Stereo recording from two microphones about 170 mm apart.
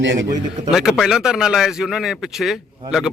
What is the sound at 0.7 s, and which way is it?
Speech, centre (ahead or behind).